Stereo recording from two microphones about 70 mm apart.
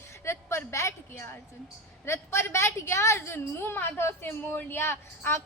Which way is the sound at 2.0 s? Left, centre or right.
Left.